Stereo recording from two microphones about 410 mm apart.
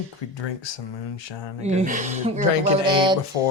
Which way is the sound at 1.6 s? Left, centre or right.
Centre.